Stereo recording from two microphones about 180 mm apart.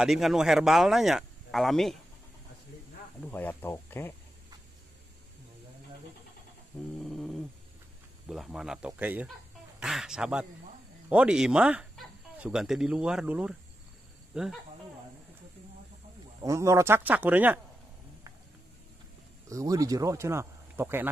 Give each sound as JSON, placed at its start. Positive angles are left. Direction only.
{"t": 0.0, "sound": "speech", "side_deg": 0}
{"t": 3.2, "sound": "speech", "side_deg": 10}
{"t": 7.0, "sound": "a sound", "side_deg": 0}
{"t": 8.3, "sound": "speech", "side_deg": 0}
{"t": 16.3, "sound": "speech", "side_deg": -15}
{"t": 19.5, "sound": "speech", "side_deg": -20}